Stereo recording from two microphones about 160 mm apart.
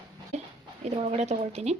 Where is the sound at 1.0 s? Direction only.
45° right (ahead or behind).